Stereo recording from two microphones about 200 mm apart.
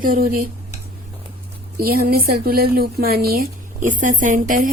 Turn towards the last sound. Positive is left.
turn(degrees=-45)  # may be behind; listen again after turning